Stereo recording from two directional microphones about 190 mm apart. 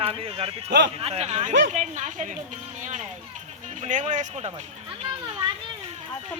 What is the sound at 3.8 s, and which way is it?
Speech, 40° right (ahead or behind).